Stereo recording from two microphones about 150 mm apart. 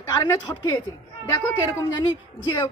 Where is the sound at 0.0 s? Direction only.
25° left (ahead or behind).